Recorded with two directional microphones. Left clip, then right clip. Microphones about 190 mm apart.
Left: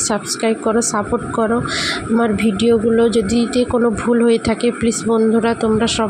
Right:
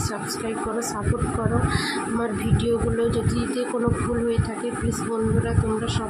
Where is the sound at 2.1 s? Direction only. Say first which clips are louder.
Left 9 dB; 30° left (ahead or behind).